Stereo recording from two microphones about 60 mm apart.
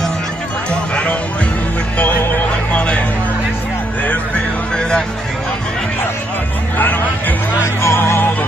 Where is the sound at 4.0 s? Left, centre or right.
Left.